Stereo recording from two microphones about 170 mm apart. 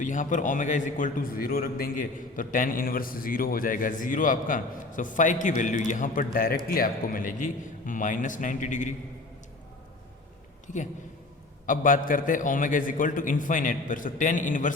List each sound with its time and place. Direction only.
0.0 s a man's voice: 50° left (ahead or behind)
11.6 s a man's voice: 50° left (ahead or behind)